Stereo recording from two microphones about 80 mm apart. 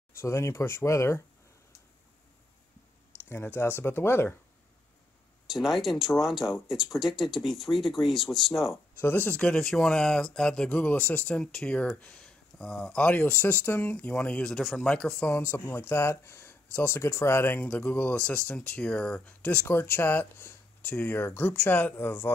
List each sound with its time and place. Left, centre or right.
0.2 s speech: left
3.3 s speech: left
5.5 s speech: centre
9.0 s speech: left
13.0 s speech: left
17.6 s speech: centre